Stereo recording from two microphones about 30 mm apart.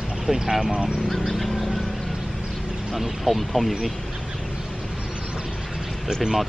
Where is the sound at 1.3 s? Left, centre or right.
Centre.